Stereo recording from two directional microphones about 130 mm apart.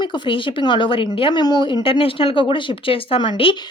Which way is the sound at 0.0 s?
40° left (ahead or behind).